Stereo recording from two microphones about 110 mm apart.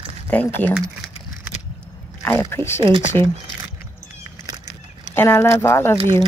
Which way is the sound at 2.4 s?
25° left (ahead or behind).